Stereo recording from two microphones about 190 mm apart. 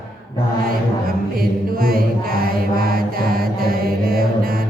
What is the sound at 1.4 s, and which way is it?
Music, 50° right (ahead or behind).